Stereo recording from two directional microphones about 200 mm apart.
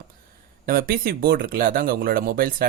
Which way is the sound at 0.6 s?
45° right (ahead or behind).